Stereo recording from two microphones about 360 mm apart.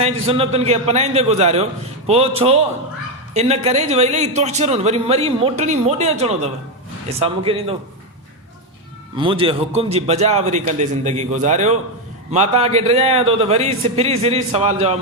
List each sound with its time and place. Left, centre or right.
0.0 s a man's voice: centre
9.1 s a man's voice: centre